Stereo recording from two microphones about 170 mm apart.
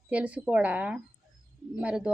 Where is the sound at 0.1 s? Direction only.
5° right (ahead or behind).